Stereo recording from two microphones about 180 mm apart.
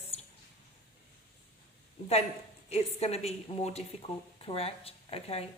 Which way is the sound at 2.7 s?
35° left (ahead or behind).